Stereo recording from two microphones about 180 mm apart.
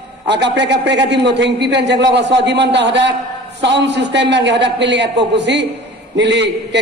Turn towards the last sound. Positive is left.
turn(degrees=-75)  # may be behind; listen again after turning